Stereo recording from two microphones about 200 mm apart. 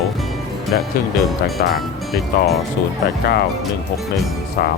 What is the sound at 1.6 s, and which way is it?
Speech, 50° left (ahead or behind).